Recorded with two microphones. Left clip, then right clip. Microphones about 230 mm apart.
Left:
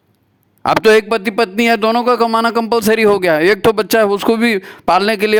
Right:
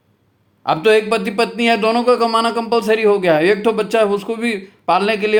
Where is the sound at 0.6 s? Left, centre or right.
Left.